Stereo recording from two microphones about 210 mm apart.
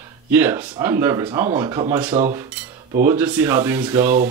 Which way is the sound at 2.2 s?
30° right (ahead or behind).